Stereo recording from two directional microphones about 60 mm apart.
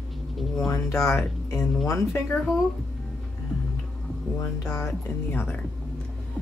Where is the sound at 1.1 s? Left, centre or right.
Left.